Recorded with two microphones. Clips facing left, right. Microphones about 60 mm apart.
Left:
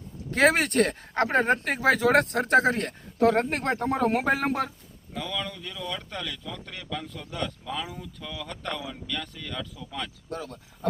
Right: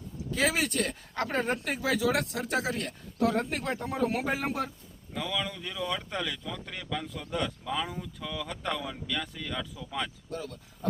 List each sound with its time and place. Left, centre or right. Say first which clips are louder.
0.3 s speech: left 7 dB; left
5.1 s speech: even; centre
10.2 s speech: left 2 dB; left